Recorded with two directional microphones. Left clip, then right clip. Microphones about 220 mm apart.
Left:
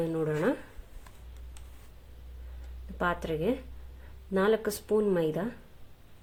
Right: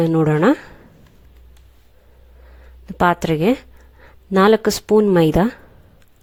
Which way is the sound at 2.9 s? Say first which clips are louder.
Right 14 dB; 45° right (ahead or behind).